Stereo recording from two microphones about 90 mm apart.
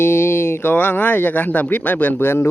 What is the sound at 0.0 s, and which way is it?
Speech, 25° left (ahead or behind).